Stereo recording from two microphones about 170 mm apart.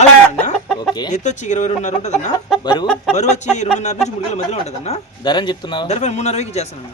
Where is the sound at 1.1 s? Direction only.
45° left (ahead or behind).